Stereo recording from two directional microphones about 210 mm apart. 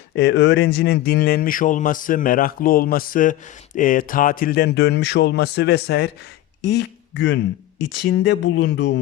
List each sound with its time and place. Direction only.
0.2 s speech: 55° left (ahead or behind)